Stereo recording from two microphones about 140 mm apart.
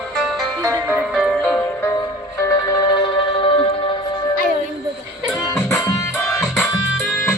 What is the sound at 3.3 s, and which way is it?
Music, 40° left (ahead or behind).